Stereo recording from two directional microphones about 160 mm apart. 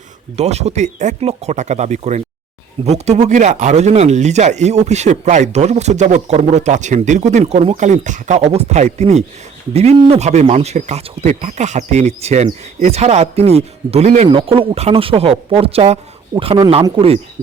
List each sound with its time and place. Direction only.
0.3 s speech: 40° right (ahead or behind)